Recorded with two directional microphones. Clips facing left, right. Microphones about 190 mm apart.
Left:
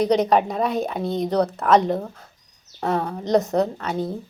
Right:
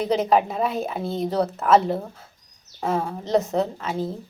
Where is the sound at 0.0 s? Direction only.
Centre (ahead or behind).